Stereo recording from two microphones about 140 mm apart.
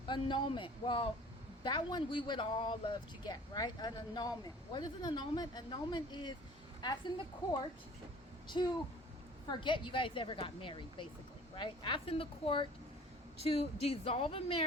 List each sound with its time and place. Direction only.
0.1 s speech: 35° left (ahead or behind)
8.6 s speech: 35° left (ahead or behind)